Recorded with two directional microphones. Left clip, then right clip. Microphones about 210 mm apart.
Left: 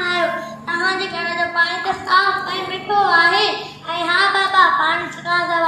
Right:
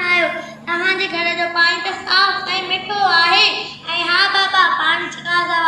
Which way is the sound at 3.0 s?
25° right (ahead or behind).